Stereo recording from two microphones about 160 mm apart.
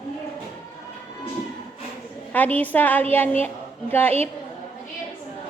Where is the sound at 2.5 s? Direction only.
10° left (ahead or behind).